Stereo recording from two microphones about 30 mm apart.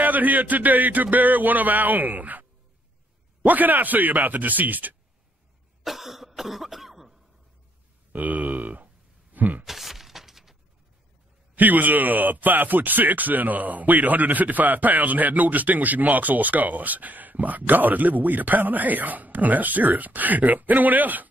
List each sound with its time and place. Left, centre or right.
0.0 s speech: right
1.1 s speech: right
3.4 s speech: right
5.9 s cough: centre
8.1 s speech: right
9.3 s a sound: right
9.7 s a sound: centre
11.5 s speech: right